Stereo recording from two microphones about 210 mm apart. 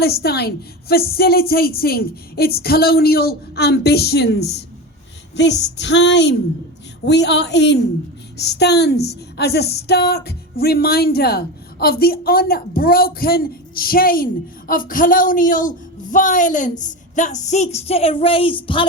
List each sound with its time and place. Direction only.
0.0 s speech: 50° left (ahead or behind)
5.4 s a sound: 55° left (ahead or behind)
8.4 s speech: 50° left (ahead or behind); by 18.9 s 25° left (ahead or behind)